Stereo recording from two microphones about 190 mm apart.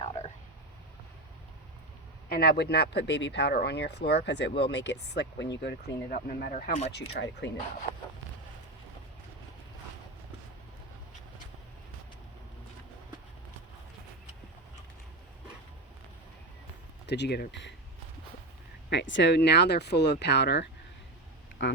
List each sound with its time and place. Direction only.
0.2 s frog: 35° left (ahead or behind)
2.3 s speech: 55° left (ahead or behind)
5.6 s speech: 50° left (ahead or behind)
7.1 s speech: 65° left (ahead or behind)
17.1 s speech: 60° left (ahead or behind)
18.9 s speech: 65° left (ahead or behind)
21.6 s speech: 80° left